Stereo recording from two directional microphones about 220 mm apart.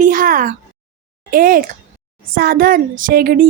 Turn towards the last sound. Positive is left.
turn(degrees=-45)  # may be behind; listen again after turning